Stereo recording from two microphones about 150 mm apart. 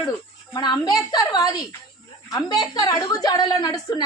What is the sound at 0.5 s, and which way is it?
A woman's voice, 25° left (ahead or behind).